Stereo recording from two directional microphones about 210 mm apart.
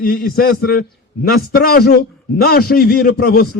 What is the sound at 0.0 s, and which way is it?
A man's voice, 45° left (ahead or behind).